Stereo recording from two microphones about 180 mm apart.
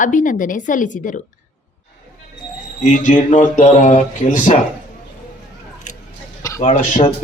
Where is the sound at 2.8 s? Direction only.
45° left (ahead or behind).